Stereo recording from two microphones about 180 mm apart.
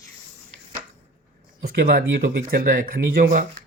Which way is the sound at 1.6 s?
55° right (ahead or behind).